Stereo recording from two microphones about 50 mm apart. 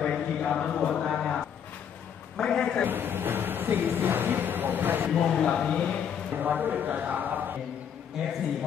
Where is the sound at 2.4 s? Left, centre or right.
Centre.